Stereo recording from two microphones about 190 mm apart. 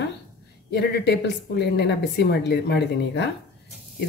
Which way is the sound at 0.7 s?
60° left (ahead or behind).